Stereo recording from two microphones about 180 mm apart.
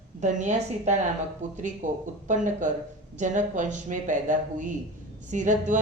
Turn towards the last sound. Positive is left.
turn(degrees=-45)  # may be behind; listen again after turning